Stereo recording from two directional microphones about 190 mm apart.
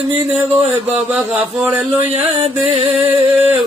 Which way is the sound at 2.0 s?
30° right (ahead or behind).